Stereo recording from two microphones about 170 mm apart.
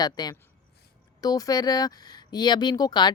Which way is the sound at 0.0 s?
25° left (ahead or behind).